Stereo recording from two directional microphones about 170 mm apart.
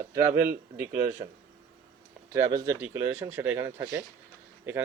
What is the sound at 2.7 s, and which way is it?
Speech, 10° right (ahead or behind).